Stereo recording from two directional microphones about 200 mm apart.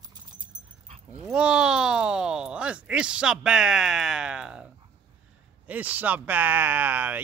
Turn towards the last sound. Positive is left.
turn(degrees=-10)  # may be behind; listen again after turning